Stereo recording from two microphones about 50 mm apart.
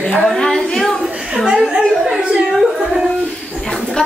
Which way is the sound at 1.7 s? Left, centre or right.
Centre.